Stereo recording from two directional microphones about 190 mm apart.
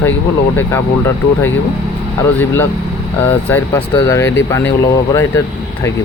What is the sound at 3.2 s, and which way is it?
Speech, 10° left (ahead or behind).